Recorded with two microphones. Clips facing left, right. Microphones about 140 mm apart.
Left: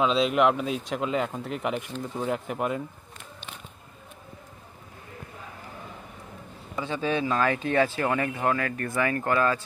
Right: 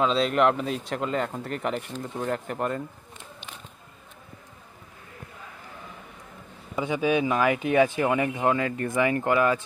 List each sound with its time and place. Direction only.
0.0 s speech: 5° left (ahead or behind)
6.8 s speech: 15° right (ahead or behind)